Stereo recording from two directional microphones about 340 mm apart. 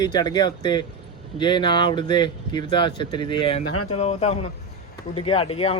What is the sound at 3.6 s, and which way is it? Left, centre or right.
Speech, left.